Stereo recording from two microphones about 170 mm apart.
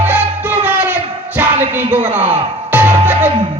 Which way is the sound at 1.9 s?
45° right (ahead or behind).